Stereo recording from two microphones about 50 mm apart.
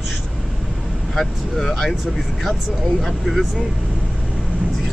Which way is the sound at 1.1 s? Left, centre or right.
Centre.